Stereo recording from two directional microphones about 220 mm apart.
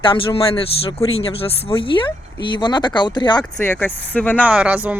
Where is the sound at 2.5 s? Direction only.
20° left (ahead or behind).